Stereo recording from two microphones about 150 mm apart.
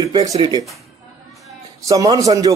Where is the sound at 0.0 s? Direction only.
25° right (ahead or behind).